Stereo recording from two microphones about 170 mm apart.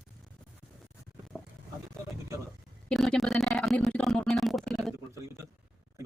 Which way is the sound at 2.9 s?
Centre (ahead or behind).